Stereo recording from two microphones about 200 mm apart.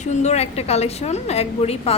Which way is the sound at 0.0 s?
35° left (ahead or behind).